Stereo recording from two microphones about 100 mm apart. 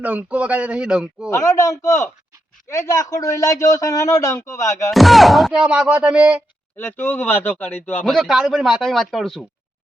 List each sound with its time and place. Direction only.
0.0 s speech: 15° right (ahead or behind)
1.3 s a man's voice: 35° left (ahead or behind)
4.9 s speech: centre (ahead or behind)
6.7 s speech: 20° left (ahead or behind)
8.0 s speech: centre (ahead or behind)